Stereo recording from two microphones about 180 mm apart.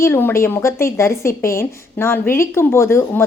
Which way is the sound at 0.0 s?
10° left (ahead or behind).